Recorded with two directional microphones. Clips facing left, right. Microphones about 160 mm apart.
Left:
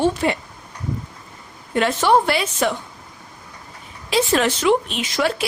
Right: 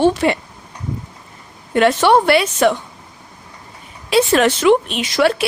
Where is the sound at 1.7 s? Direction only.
70° right (ahead or behind).